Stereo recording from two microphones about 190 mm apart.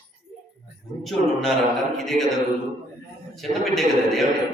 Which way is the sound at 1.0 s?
Centre (ahead or behind).